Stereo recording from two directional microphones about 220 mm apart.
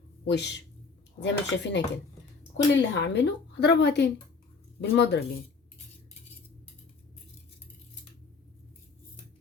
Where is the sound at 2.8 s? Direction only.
50° left (ahead or behind).